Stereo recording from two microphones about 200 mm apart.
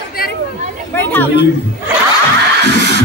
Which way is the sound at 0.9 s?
10° left (ahead or behind).